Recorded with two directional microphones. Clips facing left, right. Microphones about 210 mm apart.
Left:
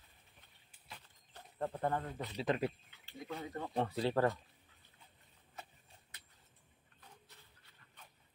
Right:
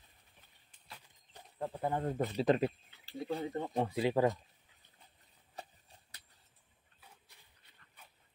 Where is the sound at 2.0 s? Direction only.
45° right (ahead or behind).